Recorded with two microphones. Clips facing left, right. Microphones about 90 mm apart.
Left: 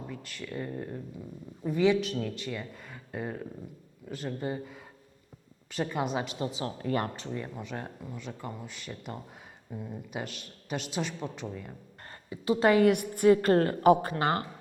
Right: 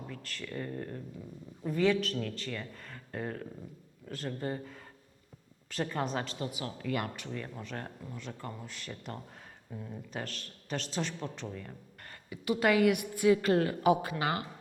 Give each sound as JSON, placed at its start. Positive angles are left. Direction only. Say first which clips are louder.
{"t": 0.1, "sound": "a woman's voice", "louder": "left 2 dB", "side_deg": 10}
{"t": 6.4, "sound": "speech", "louder": "left 4 dB", "side_deg": 30}
{"t": 7.3, "sound": "a woman's voice", "louder": "left 3 dB", "side_deg": 15}
{"t": 12.0, "sound": "a woman's voice", "louder": "left 4 dB", "side_deg": 30}